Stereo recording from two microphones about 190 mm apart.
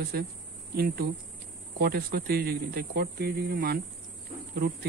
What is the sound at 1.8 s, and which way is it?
Speech, 55° right (ahead or behind).